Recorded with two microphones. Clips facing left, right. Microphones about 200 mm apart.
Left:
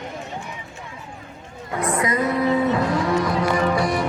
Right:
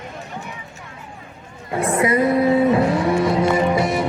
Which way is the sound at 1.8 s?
25° right (ahead or behind).